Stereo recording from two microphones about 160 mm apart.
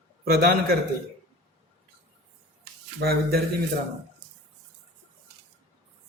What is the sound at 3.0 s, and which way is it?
Speech, 80° right.